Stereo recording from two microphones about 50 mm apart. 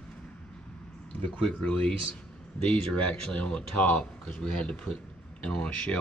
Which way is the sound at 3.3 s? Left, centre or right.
Left.